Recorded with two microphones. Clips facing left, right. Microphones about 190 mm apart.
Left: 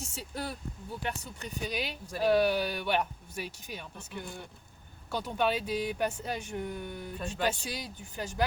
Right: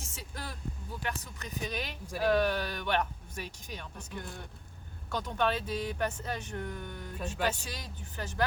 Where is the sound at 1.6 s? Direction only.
10° left (ahead or behind).